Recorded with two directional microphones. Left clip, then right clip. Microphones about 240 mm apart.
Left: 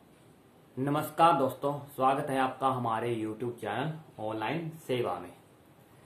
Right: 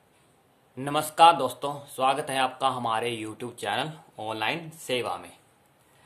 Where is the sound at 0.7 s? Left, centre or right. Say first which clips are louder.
Right 6 dB; right.